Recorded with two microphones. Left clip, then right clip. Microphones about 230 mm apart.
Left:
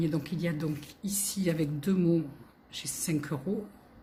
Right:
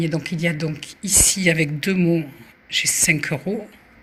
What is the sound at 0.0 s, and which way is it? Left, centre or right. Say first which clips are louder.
Speech: right 9 dB; centre.